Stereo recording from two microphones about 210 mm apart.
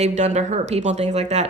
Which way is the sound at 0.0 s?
35° right (ahead or behind).